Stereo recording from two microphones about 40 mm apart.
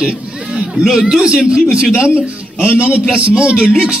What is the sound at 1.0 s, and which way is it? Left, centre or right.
Speech, right.